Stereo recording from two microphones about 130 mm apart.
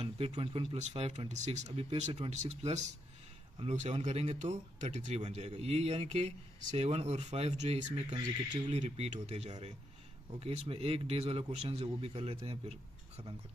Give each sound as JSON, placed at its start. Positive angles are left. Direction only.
{"t": 0.0, "sound": "speech", "side_deg": -50}
{"t": 8.1, "sound": "speech", "side_deg": -35}
{"t": 8.6, "sound": "speech", "side_deg": -55}